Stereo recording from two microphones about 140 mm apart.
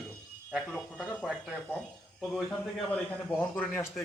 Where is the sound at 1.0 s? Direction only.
5° left (ahead or behind).